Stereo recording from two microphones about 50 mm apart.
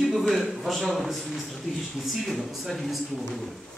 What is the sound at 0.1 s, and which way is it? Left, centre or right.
A man's voice, centre.